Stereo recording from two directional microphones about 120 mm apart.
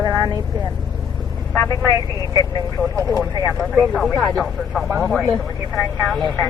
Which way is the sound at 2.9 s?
30° right (ahead or behind).